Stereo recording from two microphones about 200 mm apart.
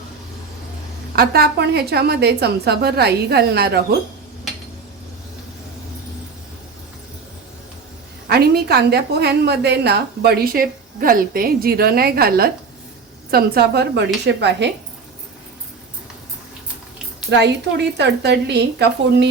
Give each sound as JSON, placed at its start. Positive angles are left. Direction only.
{"t": 1.1, "sound": "a woman's voice", "side_deg": -50}
{"t": 8.3, "sound": "a woman's voice", "side_deg": -50}
{"t": 17.3, "sound": "a woman's voice", "side_deg": -60}